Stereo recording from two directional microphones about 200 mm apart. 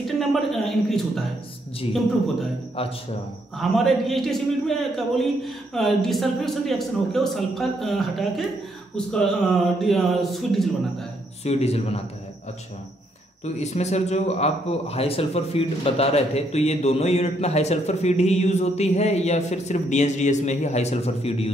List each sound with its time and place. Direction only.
0.0 s a man's voice: centre (ahead or behind)
3.7 s a man's voice: centre (ahead or behind)
11.4 s speech: 30° left (ahead or behind)
13.4 s speech: 35° left (ahead or behind)